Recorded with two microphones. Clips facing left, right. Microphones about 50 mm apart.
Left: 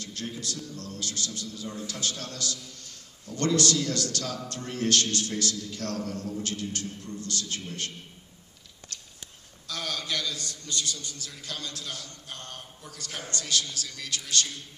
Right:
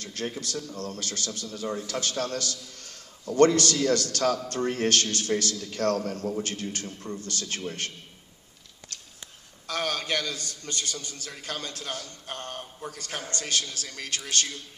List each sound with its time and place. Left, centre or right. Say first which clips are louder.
0.0 s a man's voice: right 3 dB; right
9.7 s a man's voice: right 4 dB; right